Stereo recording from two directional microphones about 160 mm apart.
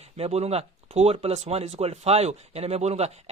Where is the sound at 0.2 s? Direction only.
40° right (ahead or behind).